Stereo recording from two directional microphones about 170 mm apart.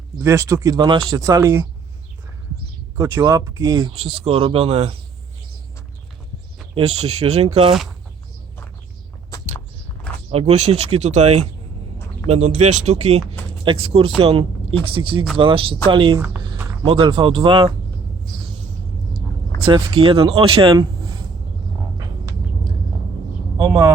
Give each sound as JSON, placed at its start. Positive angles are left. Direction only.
{"t": 0.2, "sound": "speech", "side_deg": -15}
{"t": 3.0, "sound": "speech", "side_deg": -20}
{"t": 3.9, "sound": "speech", "side_deg": -35}
{"t": 6.7, "sound": "speech", "side_deg": -40}
{"t": 10.3, "sound": "speech", "side_deg": -40}
{"t": 19.6, "sound": "speech", "side_deg": -30}
{"t": 21.9, "sound": "a sound", "side_deg": -20}
{"t": 23.6, "sound": "speech", "side_deg": -15}